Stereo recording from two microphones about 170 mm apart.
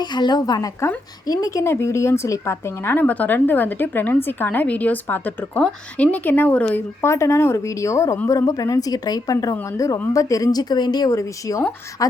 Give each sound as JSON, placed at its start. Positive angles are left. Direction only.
{"t": 0.0, "sound": "a woman's voice", "side_deg": 25}